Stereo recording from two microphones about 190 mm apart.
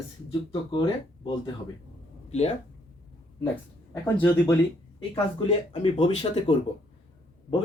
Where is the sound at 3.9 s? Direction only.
10° left (ahead or behind).